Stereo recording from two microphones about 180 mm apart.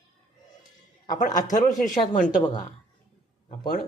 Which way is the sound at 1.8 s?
45° left (ahead or behind).